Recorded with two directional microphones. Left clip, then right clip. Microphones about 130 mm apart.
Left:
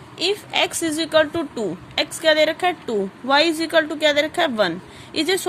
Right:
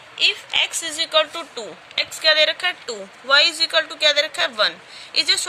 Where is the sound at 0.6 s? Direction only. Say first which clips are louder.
Even; 45° left (ahead or behind).